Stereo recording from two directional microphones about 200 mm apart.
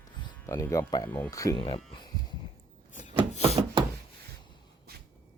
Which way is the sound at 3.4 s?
30° right (ahead or behind).